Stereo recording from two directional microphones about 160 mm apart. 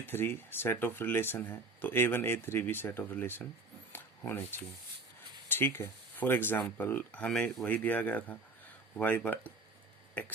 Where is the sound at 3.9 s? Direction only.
15° left (ahead or behind).